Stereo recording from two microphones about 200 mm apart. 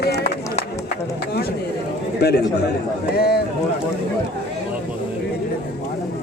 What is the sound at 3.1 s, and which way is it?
Speech, 50° left (ahead or behind).